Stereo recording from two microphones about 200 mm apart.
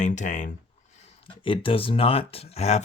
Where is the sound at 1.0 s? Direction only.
25° left (ahead or behind).